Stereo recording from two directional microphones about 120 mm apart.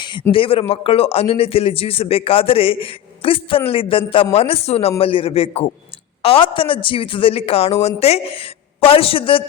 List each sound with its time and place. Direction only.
0.0 s speech: 40° left (ahead or behind)